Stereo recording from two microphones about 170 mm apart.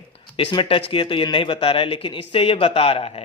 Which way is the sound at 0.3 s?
30° left (ahead or behind).